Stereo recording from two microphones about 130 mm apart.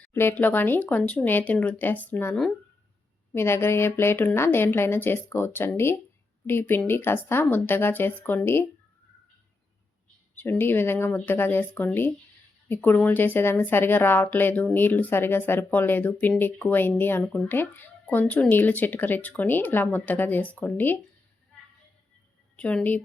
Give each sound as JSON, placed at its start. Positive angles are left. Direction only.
{"t": 0.0, "sound": "a woman's voice", "side_deg": 20}
{"t": 3.3, "sound": "a woman's voice", "side_deg": 20}
{"t": 10.3, "sound": "a woman's voice", "side_deg": 15}
{"t": 22.5, "sound": "a woman's voice", "side_deg": 10}